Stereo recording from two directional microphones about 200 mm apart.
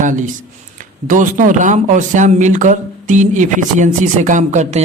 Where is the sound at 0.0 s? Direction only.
40° right (ahead or behind).